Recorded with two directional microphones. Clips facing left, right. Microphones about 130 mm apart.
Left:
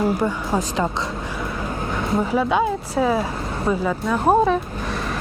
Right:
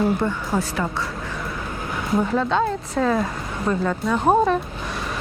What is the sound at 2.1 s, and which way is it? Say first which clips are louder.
Speech: even; 5° left (ahead or behind).